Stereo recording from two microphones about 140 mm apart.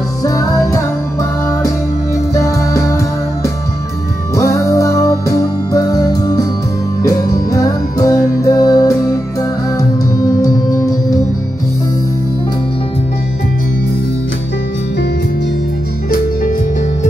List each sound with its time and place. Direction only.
0.2 s music: 25° left (ahead or behind)
2.3 s music: 20° left (ahead or behind)
4.4 s music: 20° left (ahead or behind)